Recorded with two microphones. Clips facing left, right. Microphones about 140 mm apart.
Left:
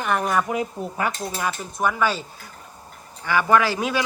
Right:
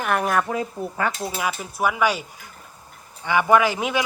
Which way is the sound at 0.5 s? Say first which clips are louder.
Even; 20° left (ahead or behind).